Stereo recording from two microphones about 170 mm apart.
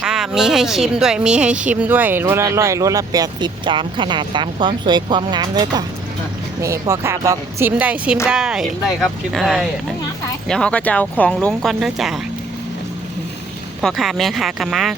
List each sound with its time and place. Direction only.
0.0 s speech: 5° right (ahead or behind)
13.8 s speech: centre (ahead or behind)